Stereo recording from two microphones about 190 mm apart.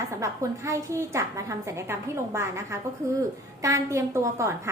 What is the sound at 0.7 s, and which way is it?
A woman's voice, 15° right (ahead or behind).